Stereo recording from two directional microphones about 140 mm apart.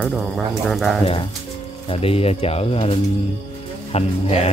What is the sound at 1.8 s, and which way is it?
Speech, 40° left (ahead or behind).